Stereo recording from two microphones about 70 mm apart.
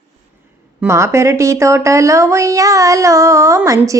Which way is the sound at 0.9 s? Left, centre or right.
Right.